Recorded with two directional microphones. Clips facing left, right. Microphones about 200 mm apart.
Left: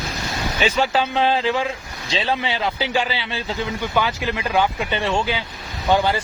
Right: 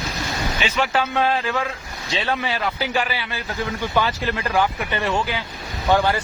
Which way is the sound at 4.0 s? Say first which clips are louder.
Even; 10° left (ahead or behind).